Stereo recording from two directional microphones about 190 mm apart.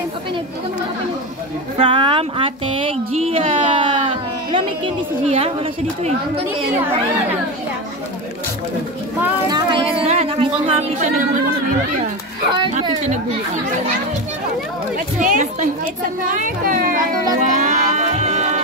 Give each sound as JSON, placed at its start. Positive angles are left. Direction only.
{"t": 1.8, "sound": "speech", "side_deg": -25}
{"t": 9.5, "sound": "speech", "side_deg": -25}
{"t": 12.5, "sound": "speech", "side_deg": -25}
{"t": 15.1, "sound": "speech", "side_deg": -40}
{"t": 17.5, "sound": "music", "side_deg": -35}